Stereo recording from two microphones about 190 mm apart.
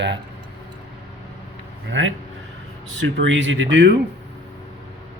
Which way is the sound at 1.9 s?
90° right.